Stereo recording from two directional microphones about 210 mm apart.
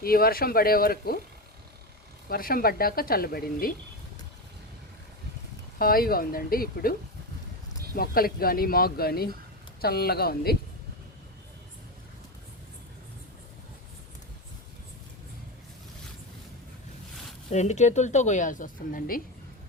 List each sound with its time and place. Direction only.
0.0 s speech: 45° left (ahead or behind)
2.3 s speech: 45° left (ahead or behind)
5.8 s speech: 45° left (ahead or behind)
7.9 s speech: 45° left (ahead or behind)
17.5 s a woman's voice: 35° left (ahead or behind)